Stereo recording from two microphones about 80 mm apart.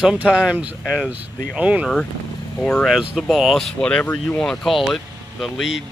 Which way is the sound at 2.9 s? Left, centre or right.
Centre.